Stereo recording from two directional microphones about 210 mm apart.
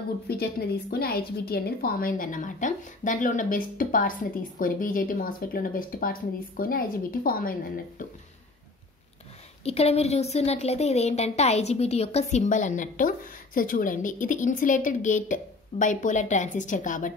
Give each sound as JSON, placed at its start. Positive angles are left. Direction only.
{"t": 0.3, "sound": "a woman's voice", "side_deg": 45}
{"t": 9.7, "sound": "a woman's voice", "side_deg": 30}